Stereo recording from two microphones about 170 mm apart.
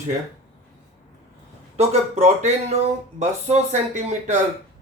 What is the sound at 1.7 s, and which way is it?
A man's voice, 40° right (ahead or behind).